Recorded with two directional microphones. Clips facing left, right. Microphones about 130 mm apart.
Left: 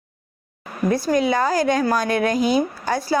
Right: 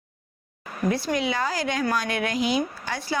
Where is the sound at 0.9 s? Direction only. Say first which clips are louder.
Left 8 dB; 45° left (ahead or behind).